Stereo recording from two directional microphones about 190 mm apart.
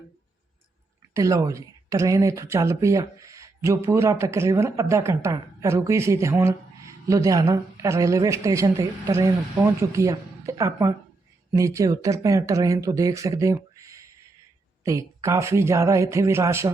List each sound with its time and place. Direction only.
1.1 s speech: 15° right (ahead or behind)